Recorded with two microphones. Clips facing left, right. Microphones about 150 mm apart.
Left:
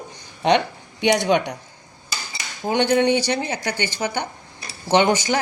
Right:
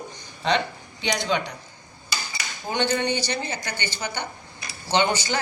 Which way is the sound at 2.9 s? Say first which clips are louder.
Left 7 dB; 90° left.